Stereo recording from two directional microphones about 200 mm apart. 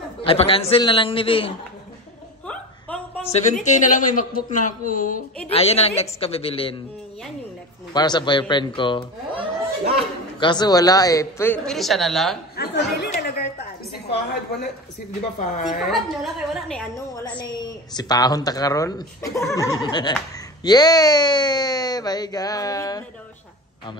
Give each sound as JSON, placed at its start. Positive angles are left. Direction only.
{"t": 0.2, "sound": "a woman's voice", "side_deg": 30}
{"t": 2.4, "sound": "a sound", "side_deg": 5}
{"t": 3.3, "sound": "speech", "side_deg": 35}
{"t": 5.5, "sound": "a woman's voice", "side_deg": 30}
{"t": 7.9, "sound": "a woman's voice", "side_deg": 20}
{"t": 9.3, "sound": "a sound", "side_deg": -25}
{"t": 10.4, "sound": "speech", "side_deg": 20}
{"t": 12.5, "sound": "chatter", "side_deg": 55}
{"t": 13.9, "sound": "a sound", "side_deg": 55}
{"t": 15.3, "sound": "speech", "side_deg": 40}
{"t": 15.9, "sound": "a woman's voice", "side_deg": 0}
{"t": 17.4, "sound": "a woman's voice", "side_deg": 20}